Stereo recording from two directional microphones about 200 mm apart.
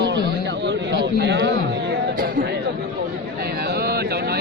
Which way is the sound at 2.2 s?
45° right (ahead or behind).